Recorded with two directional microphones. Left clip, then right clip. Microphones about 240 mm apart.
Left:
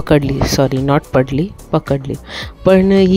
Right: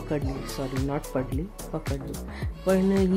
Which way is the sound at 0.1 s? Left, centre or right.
Left.